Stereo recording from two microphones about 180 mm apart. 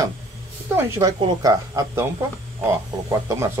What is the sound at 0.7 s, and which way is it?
A woman's voice, 15° right (ahead or behind).